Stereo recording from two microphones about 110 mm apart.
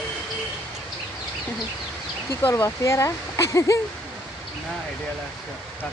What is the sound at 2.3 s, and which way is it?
Speech, 25° left (ahead or behind).